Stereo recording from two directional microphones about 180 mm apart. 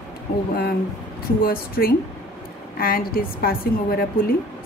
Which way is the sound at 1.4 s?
55° left (ahead or behind).